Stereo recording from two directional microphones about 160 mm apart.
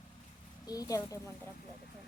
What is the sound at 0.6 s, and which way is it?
Speech, 20° left (ahead or behind).